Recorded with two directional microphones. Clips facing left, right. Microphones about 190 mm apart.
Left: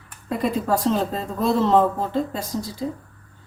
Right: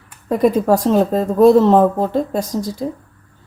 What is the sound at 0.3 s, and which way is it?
A woman's voice, 45° right (ahead or behind).